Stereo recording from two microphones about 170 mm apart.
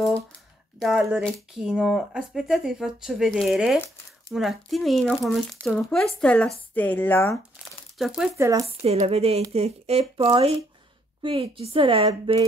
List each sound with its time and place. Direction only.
0.7 s a woman's voice: centre (ahead or behind)
8.0 s speech: 5° right (ahead or behind)
8.4 s speech: 20° right (ahead or behind)
8.6 s speech: 35° right (ahead or behind)